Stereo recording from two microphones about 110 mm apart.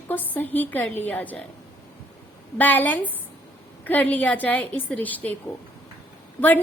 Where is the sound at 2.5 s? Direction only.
15° left (ahead or behind).